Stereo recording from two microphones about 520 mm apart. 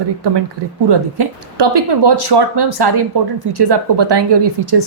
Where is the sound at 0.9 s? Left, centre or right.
Right.